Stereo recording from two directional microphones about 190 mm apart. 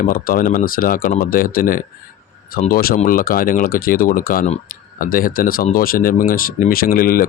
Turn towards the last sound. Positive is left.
turn(degrees=50)  # may be behind; listen again after turning